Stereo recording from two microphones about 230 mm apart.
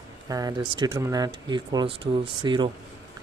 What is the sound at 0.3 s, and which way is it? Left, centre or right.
Speech, centre.